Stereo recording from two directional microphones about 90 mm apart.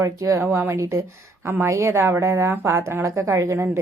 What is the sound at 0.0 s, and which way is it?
Speech, 35° right (ahead or behind).